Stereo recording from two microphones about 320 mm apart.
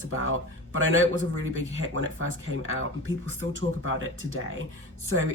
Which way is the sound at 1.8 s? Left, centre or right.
Right.